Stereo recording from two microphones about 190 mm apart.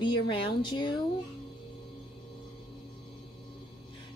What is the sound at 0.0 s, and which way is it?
Speech, 25° left (ahead or behind).